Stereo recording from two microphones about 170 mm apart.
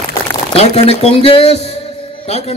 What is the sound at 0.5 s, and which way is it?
Speech, 35° left (ahead or behind).